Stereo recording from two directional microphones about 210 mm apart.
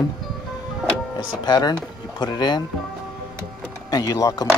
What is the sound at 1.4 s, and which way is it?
Speech, 20° left (ahead or behind).